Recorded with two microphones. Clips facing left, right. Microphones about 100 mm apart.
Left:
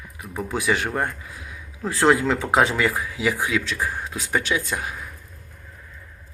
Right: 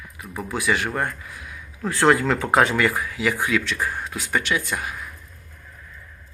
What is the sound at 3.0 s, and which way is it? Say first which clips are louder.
Speech: even; 15° left (ahead or behind).